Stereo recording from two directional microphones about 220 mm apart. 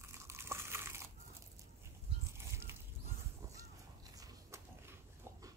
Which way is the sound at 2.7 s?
10° right (ahead or behind).